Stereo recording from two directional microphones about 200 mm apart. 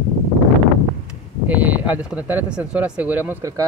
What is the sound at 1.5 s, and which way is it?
Speech, 10° right (ahead or behind).